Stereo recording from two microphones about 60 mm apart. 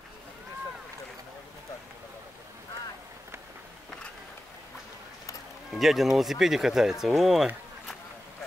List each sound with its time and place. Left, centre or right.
5.8 s speech: centre